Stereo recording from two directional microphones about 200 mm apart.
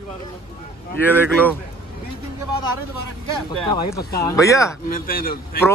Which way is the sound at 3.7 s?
20° left (ahead or behind).